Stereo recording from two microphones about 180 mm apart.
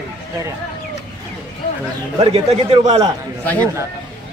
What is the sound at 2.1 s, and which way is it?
Speech, 35° right (ahead or behind).